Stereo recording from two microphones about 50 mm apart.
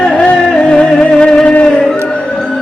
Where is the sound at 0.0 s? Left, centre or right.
Centre.